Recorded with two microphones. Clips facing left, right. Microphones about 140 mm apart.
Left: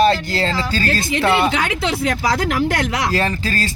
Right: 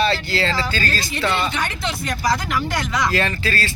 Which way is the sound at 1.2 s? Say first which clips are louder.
Left 5 dB; 70° left (ahead or behind).